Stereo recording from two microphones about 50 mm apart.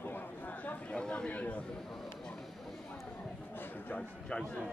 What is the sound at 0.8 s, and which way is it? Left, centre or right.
Speech, centre.